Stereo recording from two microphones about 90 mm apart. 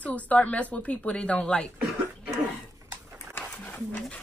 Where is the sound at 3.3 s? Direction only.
15° left (ahead or behind).